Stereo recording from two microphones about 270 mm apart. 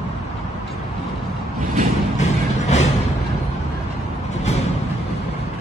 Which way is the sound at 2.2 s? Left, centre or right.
Left.